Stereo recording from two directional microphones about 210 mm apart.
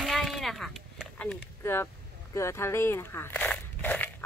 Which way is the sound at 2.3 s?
15° left (ahead or behind).